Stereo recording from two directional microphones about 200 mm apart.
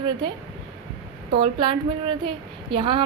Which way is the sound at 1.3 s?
25° right (ahead or behind).